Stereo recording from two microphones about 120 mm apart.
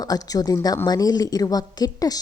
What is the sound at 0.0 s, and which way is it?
Speech, 30° left (ahead or behind).